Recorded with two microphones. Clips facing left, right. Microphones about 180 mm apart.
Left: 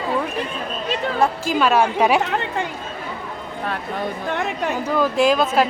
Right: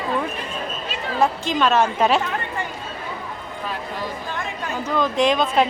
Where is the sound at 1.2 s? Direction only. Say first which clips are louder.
Even; 10° left (ahead or behind).